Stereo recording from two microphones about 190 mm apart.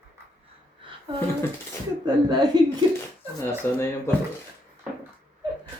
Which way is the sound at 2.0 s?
20° right (ahead or behind).